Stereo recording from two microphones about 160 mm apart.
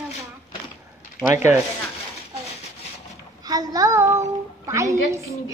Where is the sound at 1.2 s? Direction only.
20° right (ahead or behind).